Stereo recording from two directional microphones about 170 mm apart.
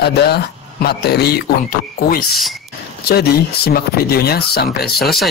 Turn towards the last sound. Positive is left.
turn(degrees=65)  # may be behind; listen again after turning